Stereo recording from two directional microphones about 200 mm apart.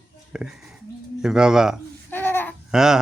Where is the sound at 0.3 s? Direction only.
5° right (ahead or behind).